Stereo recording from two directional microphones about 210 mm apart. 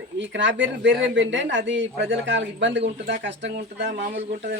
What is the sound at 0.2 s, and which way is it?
A man's voice, 60° right (ahead or behind).